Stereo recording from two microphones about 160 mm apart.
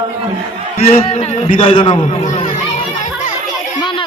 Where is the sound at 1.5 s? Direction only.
50° left (ahead or behind).